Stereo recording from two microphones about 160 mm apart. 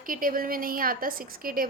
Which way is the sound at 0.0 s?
60° right (ahead or behind).